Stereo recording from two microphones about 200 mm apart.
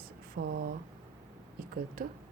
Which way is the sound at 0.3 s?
55° right (ahead or behind).